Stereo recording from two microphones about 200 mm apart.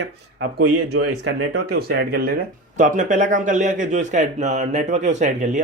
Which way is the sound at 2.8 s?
40° right (ahead or behind).